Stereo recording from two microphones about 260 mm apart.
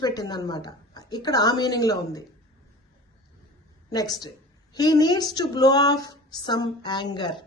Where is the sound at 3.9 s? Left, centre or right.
Centre.